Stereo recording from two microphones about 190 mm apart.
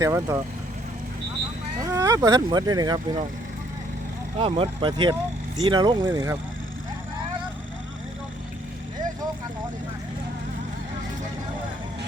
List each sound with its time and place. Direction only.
0.0 s speech: 15° right (ahead or behind)
1.8 s speech: 15° right (ahead or behind)
4.4 s speech: 30° right (ahead or behind)